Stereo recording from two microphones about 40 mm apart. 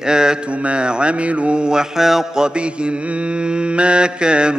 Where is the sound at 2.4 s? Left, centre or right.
Right.